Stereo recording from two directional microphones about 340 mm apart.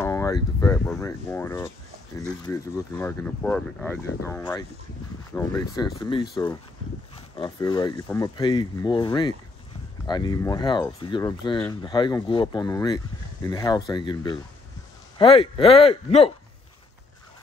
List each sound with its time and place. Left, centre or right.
0.0 s speech: centre